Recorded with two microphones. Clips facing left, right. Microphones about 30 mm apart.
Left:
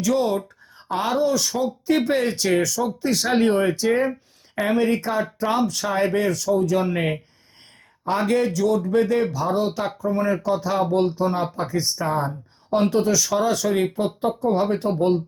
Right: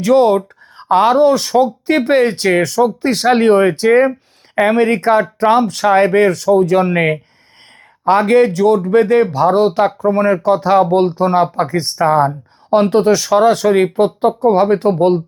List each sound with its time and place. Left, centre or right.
0.0 s speech: right